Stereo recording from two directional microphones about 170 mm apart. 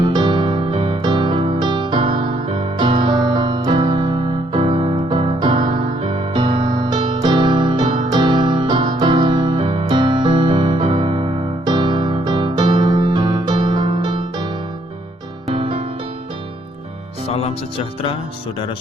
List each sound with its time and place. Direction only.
0.0 s music: 25° right (ahead or behind)
15.4 s music: 35° right (ahead or behind)
17.2 s music: 35° left (ahead or behind)